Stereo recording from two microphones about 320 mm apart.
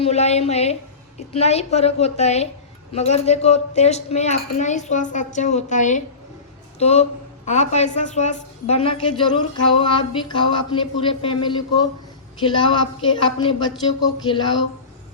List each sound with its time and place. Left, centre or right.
0.0 s a woman's voice: centre